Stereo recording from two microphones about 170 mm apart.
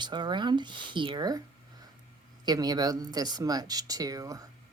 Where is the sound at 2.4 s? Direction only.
25° right (ahead or behind).